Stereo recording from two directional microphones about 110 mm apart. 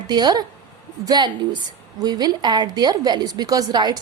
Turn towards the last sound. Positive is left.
turn(degrees=-40)  # may be behind; listen again after turning